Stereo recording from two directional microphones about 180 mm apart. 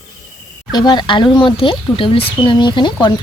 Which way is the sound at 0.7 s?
25° left (ahead or behind).